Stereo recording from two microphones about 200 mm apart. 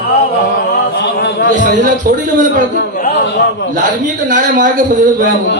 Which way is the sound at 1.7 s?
40° right (ahead or behind).